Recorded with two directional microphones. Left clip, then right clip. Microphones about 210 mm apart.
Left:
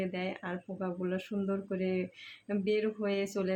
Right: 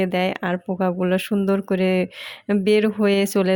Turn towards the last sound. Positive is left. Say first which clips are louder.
# right 14 dB
turn(degrees=-45)  # may be behind; listen again after turning